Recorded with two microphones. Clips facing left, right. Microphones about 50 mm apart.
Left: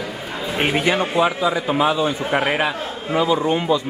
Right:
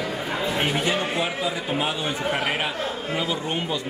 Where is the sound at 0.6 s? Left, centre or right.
Left.